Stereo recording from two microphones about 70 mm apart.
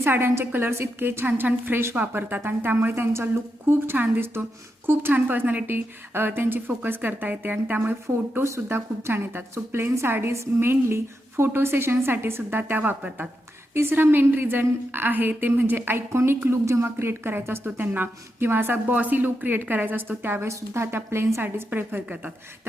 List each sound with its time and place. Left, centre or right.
0.0 s a woman's voice: right
3.7 s a woman's voice: right
8.4 s a woman's voice: right
13.0 s a woman's voice: centre
13.7 s a woman's voice: right
21.4 s a woman's voice: right